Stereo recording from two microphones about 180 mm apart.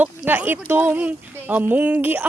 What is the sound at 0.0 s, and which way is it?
Speech, 10° right (ahead or behind).